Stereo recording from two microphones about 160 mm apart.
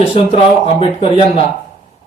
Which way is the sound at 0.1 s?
40° left (ahead or behind).